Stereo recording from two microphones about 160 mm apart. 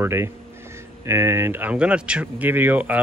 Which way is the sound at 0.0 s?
15° right (ahead or behind).